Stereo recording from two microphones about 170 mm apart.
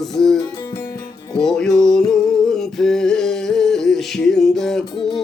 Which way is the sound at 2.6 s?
5° left (ahead or behind).